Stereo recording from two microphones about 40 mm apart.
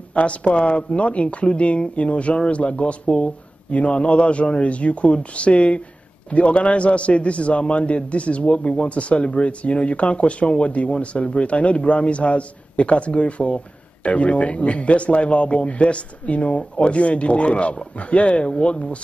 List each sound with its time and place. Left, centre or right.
0.1 s a man's voice: left